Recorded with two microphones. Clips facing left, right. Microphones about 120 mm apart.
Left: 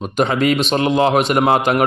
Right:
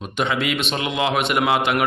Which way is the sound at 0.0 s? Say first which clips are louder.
Left 6 dB; 40° left (ahead or behind).